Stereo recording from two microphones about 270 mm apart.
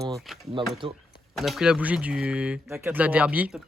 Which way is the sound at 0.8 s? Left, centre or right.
Centre.